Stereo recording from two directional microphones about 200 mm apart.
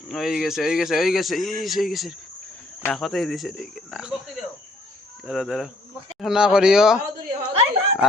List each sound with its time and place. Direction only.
0.1 s speech: centre (ahead or behind)
5.2 s speech: 5° right (ahead or behind)
7.3 s a sound: 25° right (ahead or behind)